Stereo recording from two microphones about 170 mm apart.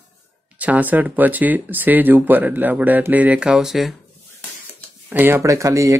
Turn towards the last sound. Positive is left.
turn(degrees=-20)  # may be behind; listen again after turning